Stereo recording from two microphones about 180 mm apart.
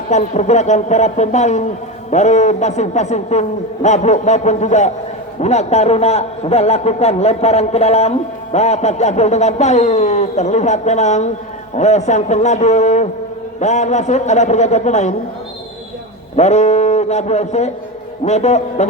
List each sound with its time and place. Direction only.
0.1 s a man's voice: 40° left (ahead or behind)
16.3 s a man's voice: 40° left (ahead or behind)